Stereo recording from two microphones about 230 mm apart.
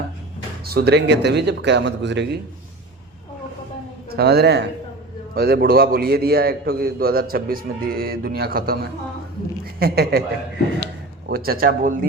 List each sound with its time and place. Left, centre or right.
0.6 s a man's voice: right
4.1 s a man's voice: right
11.3 s a man's voice: right